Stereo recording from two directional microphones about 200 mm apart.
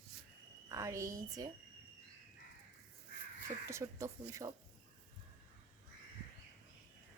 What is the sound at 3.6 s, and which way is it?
Speech, 15° right (ahead or behind).